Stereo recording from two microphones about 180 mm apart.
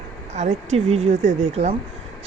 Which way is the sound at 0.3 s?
40° right (ahead or behind).